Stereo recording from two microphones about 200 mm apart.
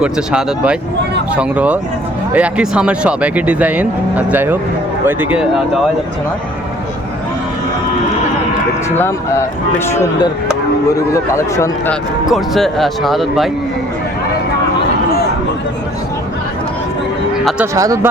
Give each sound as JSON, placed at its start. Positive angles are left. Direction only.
{"t": 0.0, "sound": "speech", "side_deg": -5}
{"t": 9.0, "sound": "speech", "side_deg": 10}
{"t": 11.1, "sound": "speech", "side_deg": 15}
{"t": 12.3, "sound": "speech", "side_deg": 0}
{"t": 17.7, "sound": "speech", "side_deg": -15}